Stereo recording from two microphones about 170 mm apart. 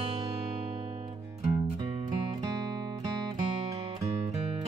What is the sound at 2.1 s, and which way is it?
Music, 20° right (ahead or behind).